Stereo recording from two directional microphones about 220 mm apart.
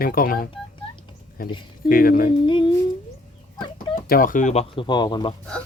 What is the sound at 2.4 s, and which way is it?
Speech, 20° left (ahead or behind).